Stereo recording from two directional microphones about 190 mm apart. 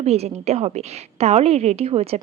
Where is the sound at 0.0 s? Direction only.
35° right (ahead or behind).